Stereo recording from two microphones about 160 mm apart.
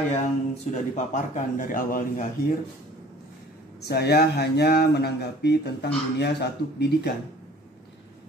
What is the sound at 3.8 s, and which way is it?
Speech, 85° left.